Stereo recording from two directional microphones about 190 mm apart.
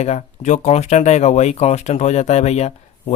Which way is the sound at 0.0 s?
35° left (ahead or behind).